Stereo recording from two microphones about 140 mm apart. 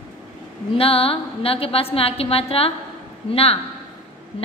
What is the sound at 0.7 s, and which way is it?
A woman's voice, 45° left (ahead or behind).